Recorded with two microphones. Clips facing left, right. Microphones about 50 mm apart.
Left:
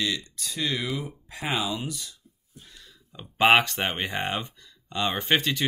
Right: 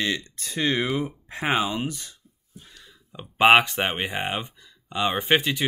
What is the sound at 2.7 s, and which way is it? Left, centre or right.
Speech, centre.